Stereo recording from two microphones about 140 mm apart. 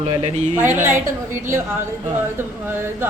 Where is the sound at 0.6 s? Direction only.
15° right (ahead or behind).